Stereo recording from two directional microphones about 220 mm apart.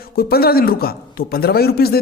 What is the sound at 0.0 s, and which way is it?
A man's voice, 45° left (ahead or behind).